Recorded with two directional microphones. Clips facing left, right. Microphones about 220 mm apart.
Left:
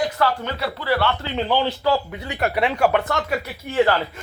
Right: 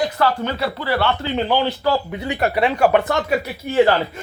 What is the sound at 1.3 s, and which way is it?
A man's voice, 10° right (ahead or behind).